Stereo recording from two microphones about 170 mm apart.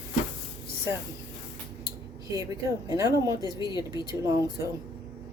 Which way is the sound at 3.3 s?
25° left (ahead or behind).